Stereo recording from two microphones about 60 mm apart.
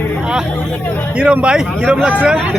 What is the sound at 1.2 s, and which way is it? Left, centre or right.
Speech, centre.